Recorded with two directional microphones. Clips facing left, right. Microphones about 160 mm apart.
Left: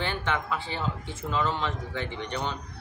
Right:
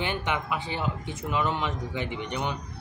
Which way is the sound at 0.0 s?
15° right (ahead or behind).